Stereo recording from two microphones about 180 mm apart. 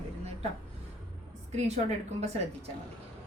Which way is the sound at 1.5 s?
35° right (ahead or behind).